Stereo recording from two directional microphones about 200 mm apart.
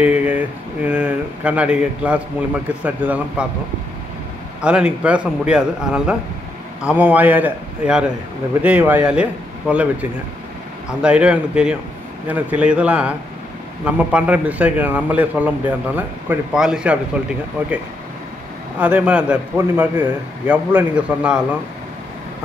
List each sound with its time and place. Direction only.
0.0 s a man's voice: 5° right (ahead or behind)
4.6 s a man's voice: 5° right (ahead or behind)
11.0 s a man's voice: 5° right (ahead or behind)
18.8 s a man's voice: 5° right (ahead or behind)